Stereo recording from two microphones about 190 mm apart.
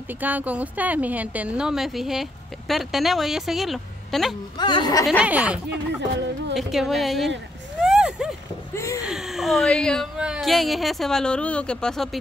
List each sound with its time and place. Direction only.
0.2 s a woman's voice: 10° right (ahead or behind)
4.6 s speech: 25° left (ahead or behind)
5.2 s a woman's voice: 5° right (ahead or behind)
7.8 s a sound: 5° right (ahead or behind)
8.7 s a sound: 15° left (ahead or behind)
9.0 s speech: centre (ahead or behind)